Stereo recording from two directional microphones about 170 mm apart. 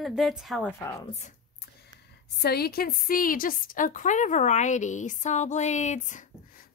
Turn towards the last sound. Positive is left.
turn(degrees=45)  # may be behind; listen again after turning